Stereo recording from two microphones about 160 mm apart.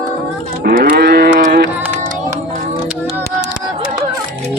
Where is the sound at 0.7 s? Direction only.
70° right (ahead or behind); by 1.7 s 90° right.